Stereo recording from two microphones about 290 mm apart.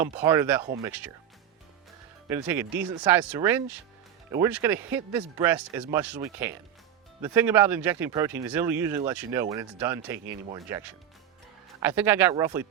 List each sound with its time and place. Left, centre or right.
0.0 s speech: centre
2.3 s speech: centre